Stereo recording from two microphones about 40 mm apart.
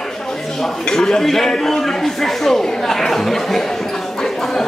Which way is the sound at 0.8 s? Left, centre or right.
Centre.